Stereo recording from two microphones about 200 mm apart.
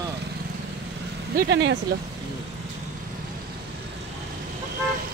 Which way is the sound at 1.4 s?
60° right (ahead or behind).